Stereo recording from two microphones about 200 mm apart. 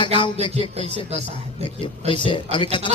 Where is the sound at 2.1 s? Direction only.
25° left (ahead or behind).